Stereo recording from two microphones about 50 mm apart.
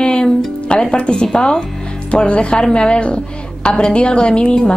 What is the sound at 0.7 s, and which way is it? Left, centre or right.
A woman's voice, left.